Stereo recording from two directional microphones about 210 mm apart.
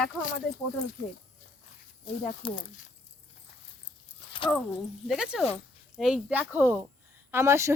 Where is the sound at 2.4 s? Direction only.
25° left (ahead or behind).